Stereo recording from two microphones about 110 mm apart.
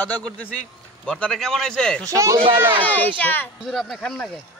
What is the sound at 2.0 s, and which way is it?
Speech, 30° right (ahead or behind).